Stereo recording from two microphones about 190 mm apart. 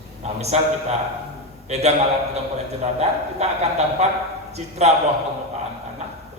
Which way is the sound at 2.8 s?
35° right (ahead or behind).